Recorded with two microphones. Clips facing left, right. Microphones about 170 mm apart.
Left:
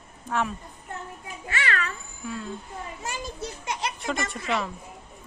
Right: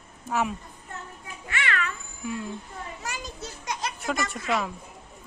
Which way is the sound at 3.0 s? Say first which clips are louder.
Left 5 dB; 25° left (ahead or behind).